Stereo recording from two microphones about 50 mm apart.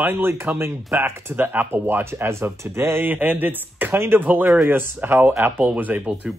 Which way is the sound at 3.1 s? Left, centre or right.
Right.